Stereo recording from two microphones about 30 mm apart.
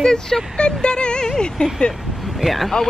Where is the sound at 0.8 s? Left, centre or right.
Left.